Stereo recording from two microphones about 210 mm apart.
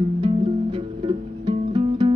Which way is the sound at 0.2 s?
25° right (ahead or behind).